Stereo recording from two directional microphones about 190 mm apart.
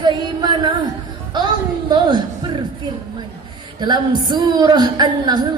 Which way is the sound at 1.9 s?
25° right (ahead or behind).